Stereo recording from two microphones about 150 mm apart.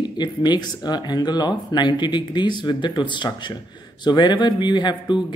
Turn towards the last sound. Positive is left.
turn(degrees=30)  # may be behind; listen again after turning